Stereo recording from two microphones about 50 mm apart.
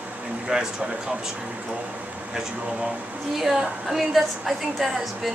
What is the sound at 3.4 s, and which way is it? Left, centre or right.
A woman's voice, centre.